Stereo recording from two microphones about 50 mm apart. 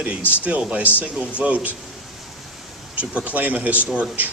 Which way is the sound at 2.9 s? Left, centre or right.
Right.